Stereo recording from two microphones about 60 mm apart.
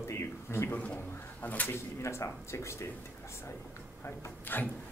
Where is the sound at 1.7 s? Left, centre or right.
Left.